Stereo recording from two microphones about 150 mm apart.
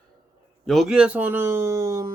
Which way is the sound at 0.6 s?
Centre (ahead or behind).